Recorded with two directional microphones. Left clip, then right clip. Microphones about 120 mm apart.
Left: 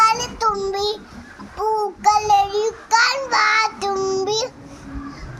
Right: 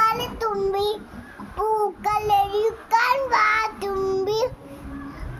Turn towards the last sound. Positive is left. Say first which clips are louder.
# left 1 dB
turn(degrees=-30)  # may be behind; listen again after turning